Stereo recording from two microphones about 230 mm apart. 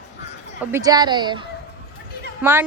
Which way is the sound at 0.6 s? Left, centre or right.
Centre.